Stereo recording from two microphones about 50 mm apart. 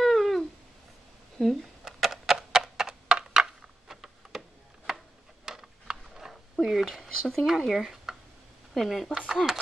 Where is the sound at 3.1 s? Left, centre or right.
Centre.